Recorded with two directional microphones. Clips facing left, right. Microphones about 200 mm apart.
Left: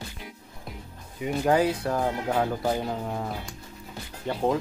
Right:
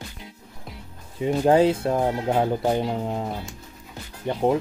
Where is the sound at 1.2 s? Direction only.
30° right (ahead or behind).